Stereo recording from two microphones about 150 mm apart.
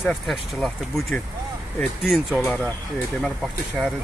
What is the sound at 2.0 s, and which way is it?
Speech, centre (ahead or behind).